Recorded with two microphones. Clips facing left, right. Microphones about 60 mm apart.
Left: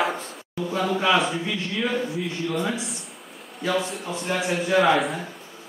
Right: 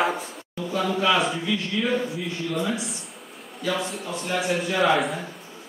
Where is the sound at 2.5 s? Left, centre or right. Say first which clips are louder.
Right 1 dB; centre.